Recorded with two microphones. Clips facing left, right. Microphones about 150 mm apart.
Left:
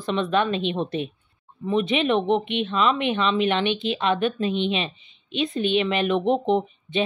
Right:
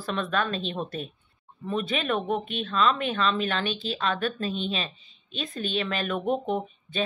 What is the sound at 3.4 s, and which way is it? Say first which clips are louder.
Speech: left 6 dB; 40° right (ahead or behind).